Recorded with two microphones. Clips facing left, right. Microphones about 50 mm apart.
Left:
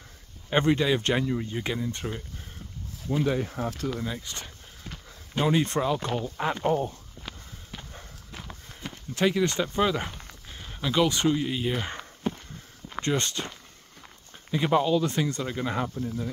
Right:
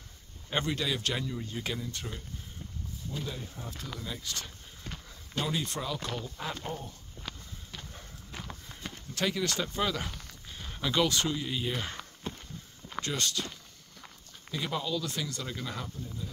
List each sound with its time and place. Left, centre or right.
0.5 s speech: left
3.3 s speech: left
4.0 s speech: left
5.5 s speech: left
5.9 s speech: left
7.2 s walk: centre
9.1 s speech: left
10.6 s a sound: centre
11.1 s speech: left
12.0 s walk: left
13.0 s speech: left